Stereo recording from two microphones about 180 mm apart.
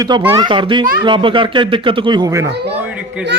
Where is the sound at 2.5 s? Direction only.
65° right (ahead or behind).